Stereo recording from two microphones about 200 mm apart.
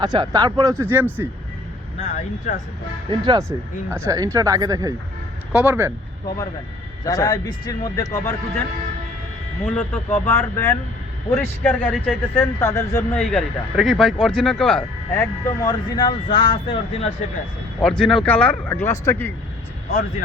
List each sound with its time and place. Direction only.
0.0 s speech: 20° right (ahead or behind)
2.0 s speech: 35° left (ahead or behind)
3.1 s speech: 20° right (ahead or behind)
5.5 s speech: 5° right (ahead or behind)
7.0 s speech: 20° left (ahead or behind)
9.6 s speech: 10° left (ahead or behind)
15.2 s speech: 20° left (ahead or behind)
17.7 s speech: 5° left (ahead or behind)
19.9 s speech: 45° left (ahead or behind)